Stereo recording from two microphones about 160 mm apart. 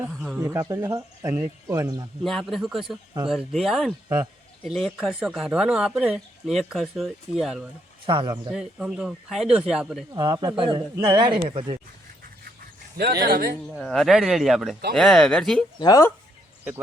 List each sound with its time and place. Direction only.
0.2 s speech: 5° right (ahead or behind)
2.2 s speech: centre (ahead or behind)
8.0 s speech: 30° right (ahead or behind)
8.5 s speech: 5° right (ahead or behind)
10.2 s speech: 25° right (ahead or behind)
13.2 s speech: 70° right (ahead or behind)
13.6 s speech: centre (ahead or behind)
15.8 s speech: 25° left (ahead or behind)